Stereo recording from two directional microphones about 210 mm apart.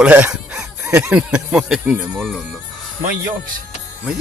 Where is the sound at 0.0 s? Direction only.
5° right (ahead or behind).